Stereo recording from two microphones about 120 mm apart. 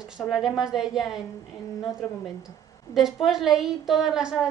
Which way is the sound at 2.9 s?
5° right (ahead or behind).